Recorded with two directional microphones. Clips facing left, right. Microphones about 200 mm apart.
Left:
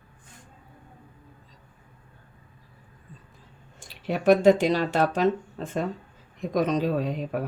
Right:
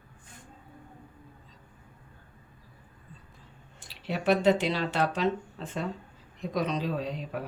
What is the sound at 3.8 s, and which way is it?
Speech, 50° left (ahead or behind).